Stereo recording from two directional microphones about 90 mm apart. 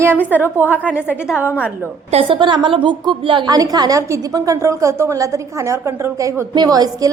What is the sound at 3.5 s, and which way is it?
A woman's voice, 45° right (ahead or behind).